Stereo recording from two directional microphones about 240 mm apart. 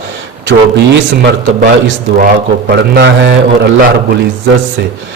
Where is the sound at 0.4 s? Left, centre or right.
Right.